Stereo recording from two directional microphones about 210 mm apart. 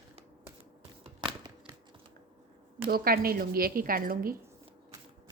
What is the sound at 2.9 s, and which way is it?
A woman's voice, 45° right (ahead or behind).